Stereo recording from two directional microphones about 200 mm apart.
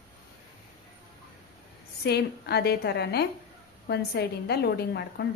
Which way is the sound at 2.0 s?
55° left (ahead or behind).